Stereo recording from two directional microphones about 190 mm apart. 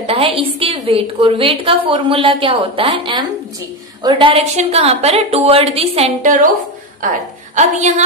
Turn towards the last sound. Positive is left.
turn(degrees=-35)  # may be behind; listen again after turning